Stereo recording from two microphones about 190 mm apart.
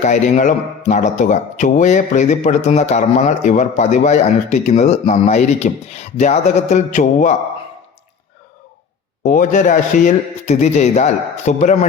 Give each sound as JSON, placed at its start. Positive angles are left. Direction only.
{"t": 0.0, "sound": "speech", "side_deg": 40}
{"t": 9.2, "sound": "speech", "side_deg": 45}